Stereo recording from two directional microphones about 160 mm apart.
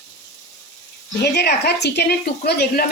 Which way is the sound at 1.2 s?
90° left.